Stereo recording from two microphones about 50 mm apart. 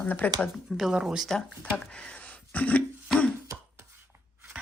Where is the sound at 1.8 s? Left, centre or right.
Left.